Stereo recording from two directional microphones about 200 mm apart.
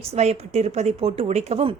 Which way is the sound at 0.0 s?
30° right (ahead or behind).